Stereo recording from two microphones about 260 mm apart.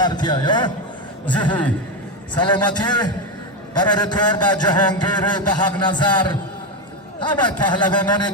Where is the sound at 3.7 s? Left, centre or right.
Centre.